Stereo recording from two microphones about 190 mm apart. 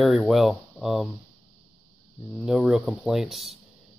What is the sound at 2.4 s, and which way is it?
Speech, 5° right (ahead or behind).